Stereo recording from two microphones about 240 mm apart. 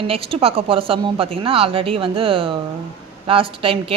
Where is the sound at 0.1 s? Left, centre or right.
Right.